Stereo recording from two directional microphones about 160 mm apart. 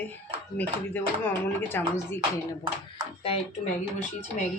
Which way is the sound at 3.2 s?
35° left (ahead or behind).